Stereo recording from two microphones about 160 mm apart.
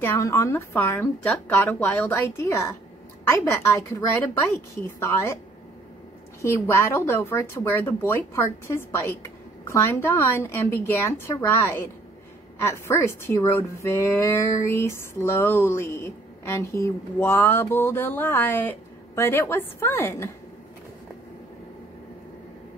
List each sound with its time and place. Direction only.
0.0 s speech: 15° left (ahead or behind)
6.4 s speech: 15° left (ahead or behind)